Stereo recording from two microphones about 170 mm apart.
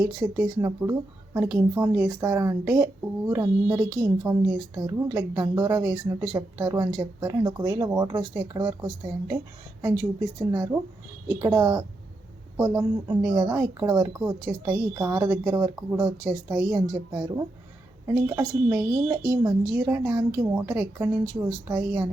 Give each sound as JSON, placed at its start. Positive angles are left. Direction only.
{"t": 0.0, "sound": "a woman's voice", "side_deg": -20}
{"t": 10.5, "sound": "a woman's voice", "side_deg": -20}